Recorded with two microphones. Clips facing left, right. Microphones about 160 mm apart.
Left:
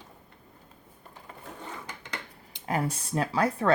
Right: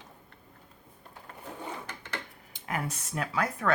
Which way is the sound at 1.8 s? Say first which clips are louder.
Even; 15° left (ahead or behind).